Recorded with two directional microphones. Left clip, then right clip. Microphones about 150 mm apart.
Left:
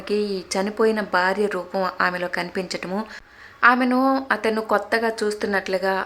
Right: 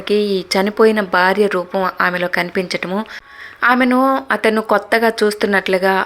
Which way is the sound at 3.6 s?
30° right (ahead or behind).